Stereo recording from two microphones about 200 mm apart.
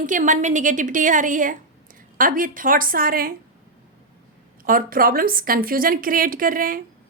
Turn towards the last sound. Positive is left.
turn(degrees=-45)  # may be behind; listen again after turning